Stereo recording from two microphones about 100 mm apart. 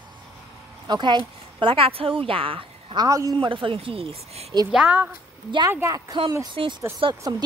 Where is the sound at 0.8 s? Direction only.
50° right (ahead or behind).